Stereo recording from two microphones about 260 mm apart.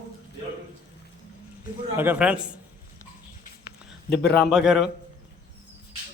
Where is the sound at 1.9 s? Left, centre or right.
Centre.